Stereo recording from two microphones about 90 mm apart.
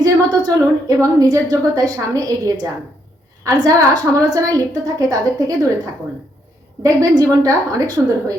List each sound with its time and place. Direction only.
0.0 s a woman's voice: 40° right (ahead or behind)
3.4 s a woman's voice: 40° right (ahead or behind)